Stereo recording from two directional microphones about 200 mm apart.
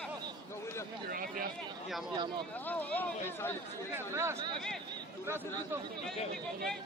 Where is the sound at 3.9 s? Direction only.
10° right (ahead or behind).